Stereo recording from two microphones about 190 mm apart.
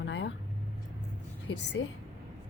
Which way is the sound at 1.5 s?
65° left (ahead or behind).